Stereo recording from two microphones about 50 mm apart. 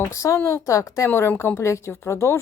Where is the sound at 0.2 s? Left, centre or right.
Left.